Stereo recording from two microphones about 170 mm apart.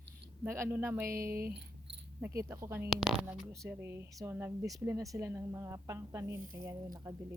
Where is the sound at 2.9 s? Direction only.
Centre (ahead or behind).